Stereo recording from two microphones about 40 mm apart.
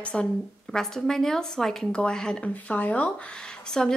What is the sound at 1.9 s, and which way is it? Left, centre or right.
Speech, left.